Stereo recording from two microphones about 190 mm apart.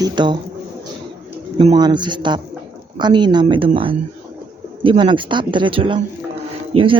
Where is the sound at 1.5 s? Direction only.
25° right (ahead or behind).